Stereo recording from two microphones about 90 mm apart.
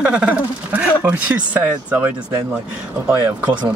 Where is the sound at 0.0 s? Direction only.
15° right (ahead or behind).